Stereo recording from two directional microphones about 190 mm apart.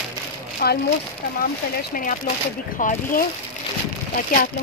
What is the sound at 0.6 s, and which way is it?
Speech, 50° left (ahead or behind).